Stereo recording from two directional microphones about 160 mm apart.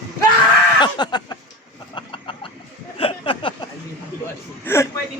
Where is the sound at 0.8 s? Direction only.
25° left (ahead or behind).